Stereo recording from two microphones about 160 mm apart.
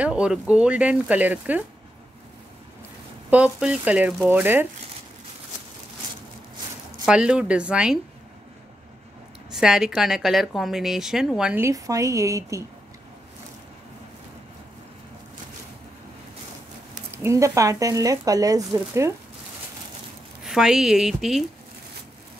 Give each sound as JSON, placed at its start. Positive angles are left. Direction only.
{"t": 0.0, "sound": "speech", "side_deg": -5}
{"t": 3.3, "sound": "speech", "side_deg": -10}
{"t": 7.1, "sound": "a woman's voice", "side_deg": -5}
{"t": 9.5, "sound": "a woman's voice", "side_deg": -5}
{"t": 11.6, "sound": "speech", "side_deg": -20}
{"t": 17.1, "sound": "speech", "side_deg": -15}
{"t": 20.4, "sound": "a woman's voice", "side_deg": 0}